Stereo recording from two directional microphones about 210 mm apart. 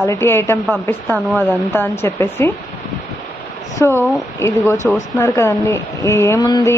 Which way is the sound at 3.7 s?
10° left (ahead or behind).